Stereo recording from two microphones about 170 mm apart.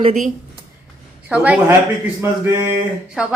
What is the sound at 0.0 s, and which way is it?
Speech, 45° right (ahead or behind).